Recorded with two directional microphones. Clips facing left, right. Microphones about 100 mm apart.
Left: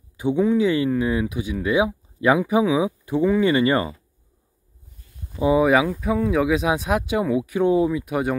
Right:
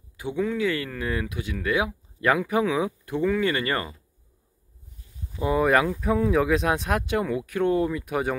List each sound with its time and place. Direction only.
0.2 s speech: 20° left (ahead or behind)
5.4 s speech: 10° left (ahead or behind)